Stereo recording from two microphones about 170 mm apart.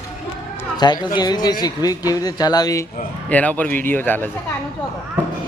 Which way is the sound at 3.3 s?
10° left (ahead or behind).